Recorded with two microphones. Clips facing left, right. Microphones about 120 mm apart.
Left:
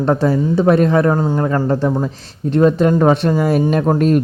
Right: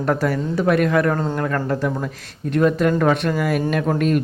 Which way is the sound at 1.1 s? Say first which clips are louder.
Left 5 dB; 15° left (ahead or behind).